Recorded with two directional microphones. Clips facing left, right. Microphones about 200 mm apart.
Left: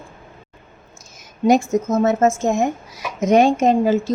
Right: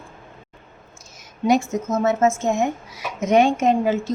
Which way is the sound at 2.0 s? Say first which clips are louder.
Left 1 dB; 40° left (ahead or behind).